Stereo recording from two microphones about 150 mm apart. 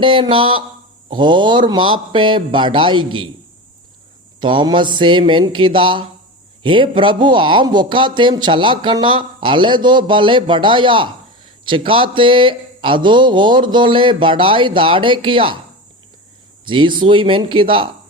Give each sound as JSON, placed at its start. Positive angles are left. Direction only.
{"t": 0.0, "sound": "speech", "side_deg": -35}
{"t": 4.4, "sound": "speech", "side_deg": -30}
{"t": 16.6, "sound": "speech", "side_deg": -35}